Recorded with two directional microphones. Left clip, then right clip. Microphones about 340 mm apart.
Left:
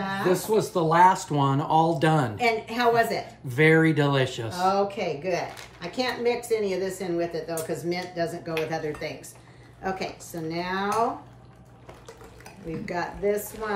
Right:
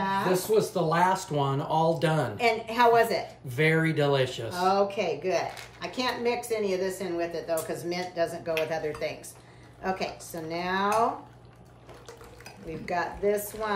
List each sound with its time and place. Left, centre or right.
0.3 s speech: centre
2.3 s speech: centre
3.4 s speech: centre
4.6 s speech: centre
12.8 s speech: centre